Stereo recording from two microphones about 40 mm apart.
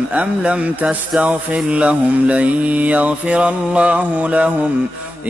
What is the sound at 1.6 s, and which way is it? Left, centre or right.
Mantra, right.